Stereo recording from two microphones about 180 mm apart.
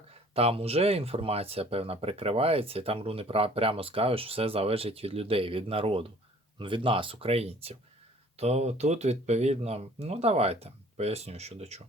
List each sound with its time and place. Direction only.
0.1 s speech: 35° right (ahead or behind)